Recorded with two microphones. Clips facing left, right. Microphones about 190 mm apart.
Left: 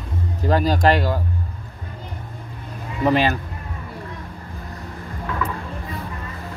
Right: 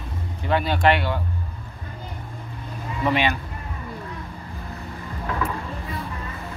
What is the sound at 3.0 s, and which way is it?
Speech, 40° left (ahead or behind).